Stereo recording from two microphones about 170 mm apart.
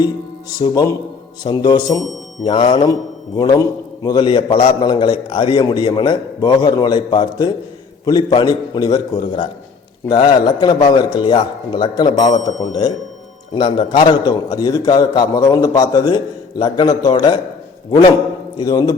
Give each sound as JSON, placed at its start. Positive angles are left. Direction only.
{"t": 0.6, "sound": "a man's voice", "side_deg": 20}
{"t": 13.5, "sound": "a man's voice", "side_deg": 30}
{"t": 18.5, "sound": "a man's voice", "side_deg": 25}